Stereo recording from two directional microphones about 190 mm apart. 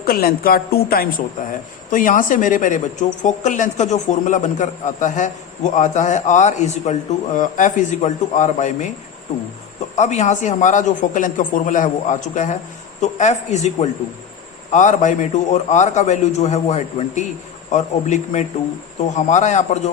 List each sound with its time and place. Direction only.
0.0 s a woman's voice: 50° left (ahead or behind)
1.4 s a woman's voice: 45° left (ahead or behind)
9.9 s speech: 40° left (ahead or behind)